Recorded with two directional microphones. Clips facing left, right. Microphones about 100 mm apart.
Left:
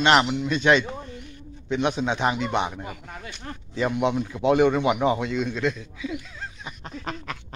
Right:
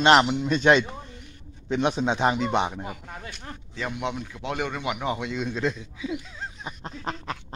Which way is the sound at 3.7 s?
5° left (ahead or behind).